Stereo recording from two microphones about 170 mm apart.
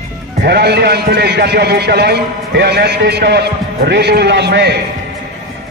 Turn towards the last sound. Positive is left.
turn(degrees=-80)